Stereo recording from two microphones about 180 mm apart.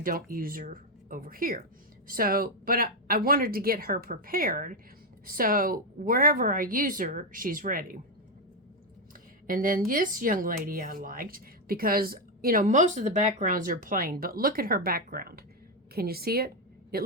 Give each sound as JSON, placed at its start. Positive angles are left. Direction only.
{"t": 0.0, "sound": "speech", "side_deg": -50}
{"t": 9.5, "sound": "a woman's voice", "side_deg": -50}